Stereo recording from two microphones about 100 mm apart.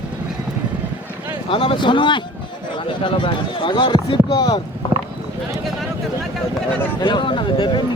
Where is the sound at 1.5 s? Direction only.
60° left (ahead or behind).